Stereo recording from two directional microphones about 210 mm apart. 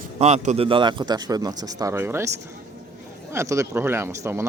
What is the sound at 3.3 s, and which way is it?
Speech, 15° right (ahead or behind).